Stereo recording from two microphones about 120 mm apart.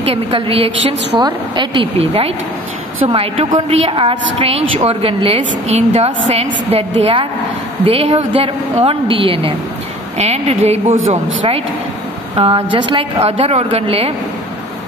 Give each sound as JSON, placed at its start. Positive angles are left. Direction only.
{"t": 0.0, "sound": "a woman's voice", "side_deg": -55}
{"t": 1.2, "sound": "a woman's voice", "side_deg": -40}
{"t": 2.0, "sound": "a woman's voice", "side_deg": -55}
{"t": 10.1, "sound": "a woman's voice", "side_deg": -60}